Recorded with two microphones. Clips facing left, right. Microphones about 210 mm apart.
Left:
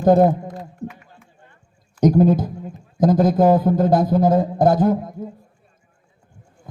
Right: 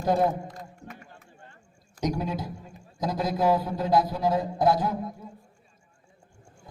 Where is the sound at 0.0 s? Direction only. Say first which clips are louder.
Left 10 dB; 55° left (ahead or behind).